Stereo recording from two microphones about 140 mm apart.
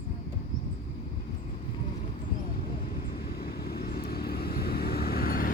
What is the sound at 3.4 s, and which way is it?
Vehicle, 90° left.